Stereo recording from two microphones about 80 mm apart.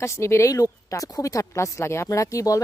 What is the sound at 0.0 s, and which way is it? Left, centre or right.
Speech, left.